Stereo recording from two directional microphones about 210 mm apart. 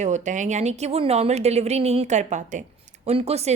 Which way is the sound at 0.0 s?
35° right (ahead or behind).